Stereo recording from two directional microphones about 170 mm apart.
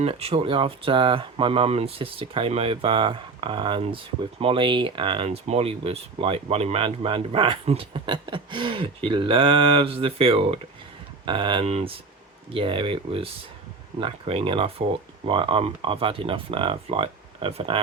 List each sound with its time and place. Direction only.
0.0 s speech: 35° right (ahead or behind)